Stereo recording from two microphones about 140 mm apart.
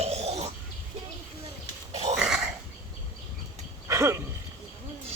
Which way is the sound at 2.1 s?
5° right (ahead or behind).